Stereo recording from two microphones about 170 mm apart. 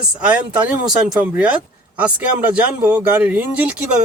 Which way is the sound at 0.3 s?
10° right (ahead or behind).